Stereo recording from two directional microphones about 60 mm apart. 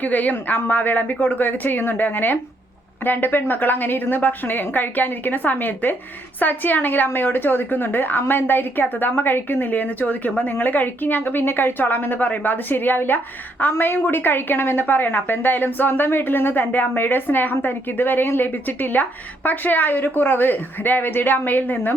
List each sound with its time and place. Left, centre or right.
0.0 s a woman's voice: left